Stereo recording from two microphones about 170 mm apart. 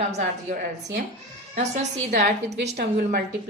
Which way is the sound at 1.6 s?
45° right (ahead or behind).